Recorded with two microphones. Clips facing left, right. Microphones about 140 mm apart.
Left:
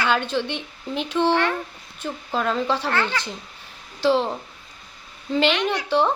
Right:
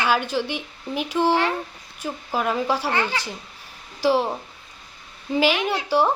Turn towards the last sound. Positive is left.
turn(degrees=-10)  # may be behind; listen again after turning